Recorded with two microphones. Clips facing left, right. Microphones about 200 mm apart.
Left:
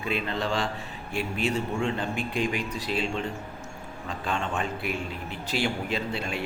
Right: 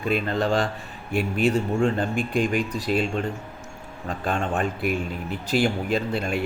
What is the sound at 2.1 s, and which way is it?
A man's voice, 50° right (ahead or behind).